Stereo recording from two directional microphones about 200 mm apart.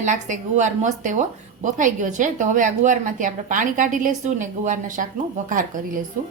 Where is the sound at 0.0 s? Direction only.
40° right (ahead or behind).